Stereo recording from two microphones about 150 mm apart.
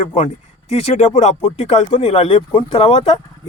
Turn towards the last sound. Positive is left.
turn(degrees=40)  # may be behind; listen again after turning